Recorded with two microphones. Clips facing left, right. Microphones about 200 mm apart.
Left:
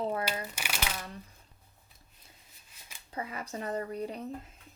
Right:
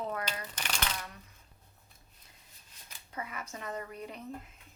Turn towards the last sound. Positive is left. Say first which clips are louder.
# left 6 dB
turn(degrees=35)  # may be behind; listen again after turning